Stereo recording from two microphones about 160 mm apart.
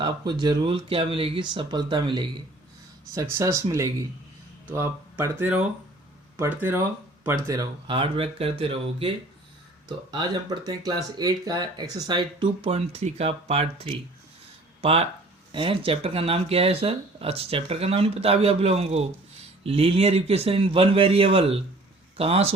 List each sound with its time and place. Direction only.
0.0 s speech: 30° right (ahead or behind)
3.2 s speech: 20° right (ahead or behind); by 22.5 s 40° right (ahead or behind)